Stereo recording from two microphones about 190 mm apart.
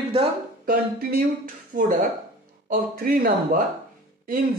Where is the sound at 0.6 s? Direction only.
50° right (ahead or behind).